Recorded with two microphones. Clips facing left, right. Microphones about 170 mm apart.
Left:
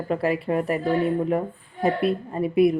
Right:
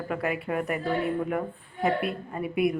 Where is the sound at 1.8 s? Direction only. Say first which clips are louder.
Left 5 dB; 30° left (ahead or behind).